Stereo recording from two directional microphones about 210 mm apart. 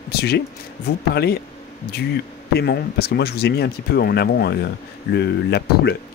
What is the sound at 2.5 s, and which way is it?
Speech, 50° left (ahead or behind).